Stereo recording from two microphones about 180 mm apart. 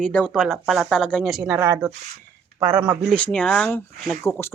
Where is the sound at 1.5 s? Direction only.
15° right (ahead or behind).